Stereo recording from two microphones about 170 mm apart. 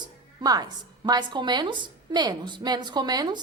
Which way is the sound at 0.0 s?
25° right (ahead or behind).